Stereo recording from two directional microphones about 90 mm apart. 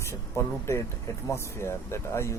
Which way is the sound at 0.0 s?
30° left (ahead or behind).